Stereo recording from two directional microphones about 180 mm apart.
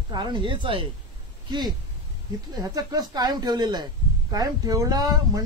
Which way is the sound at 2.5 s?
20° right (ahead or behind).